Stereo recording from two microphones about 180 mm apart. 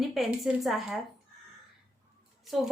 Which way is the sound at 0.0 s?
Centre (ahead or behind).